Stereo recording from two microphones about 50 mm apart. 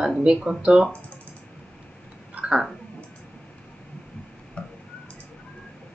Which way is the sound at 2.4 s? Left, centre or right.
Centre.